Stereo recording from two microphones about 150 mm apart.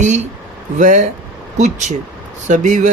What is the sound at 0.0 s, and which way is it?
Speech, 50° right (ahead or behind).